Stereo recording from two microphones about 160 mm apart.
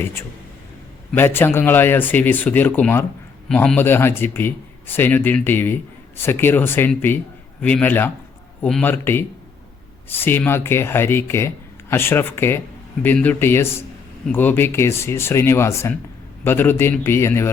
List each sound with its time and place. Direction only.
1.1 s speech: 15° left (ahead or behind)